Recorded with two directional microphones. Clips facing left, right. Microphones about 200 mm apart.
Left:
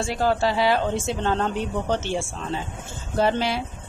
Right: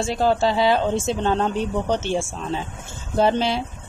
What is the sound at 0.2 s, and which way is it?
Speech, 20° right (ahead or behind).